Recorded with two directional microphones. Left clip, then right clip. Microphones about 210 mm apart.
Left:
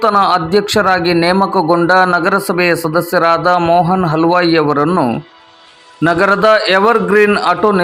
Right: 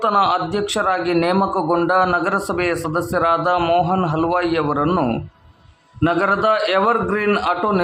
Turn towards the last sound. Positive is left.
turn(degrees=20)  # may be behind; listen again after turning